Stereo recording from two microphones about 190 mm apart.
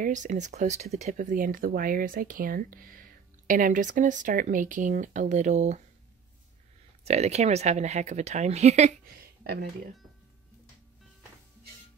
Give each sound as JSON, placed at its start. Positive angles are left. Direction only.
{"t": 0.0, "sound": "speech", "side_deg": -40}
{"t": 7.1, "sound": "speech", "side_deg": -35}
{"t": 9.1, "sound": "a sound", "side_deg": -55}